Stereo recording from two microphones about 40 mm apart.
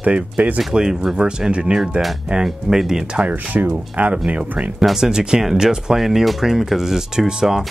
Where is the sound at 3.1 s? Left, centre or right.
Right.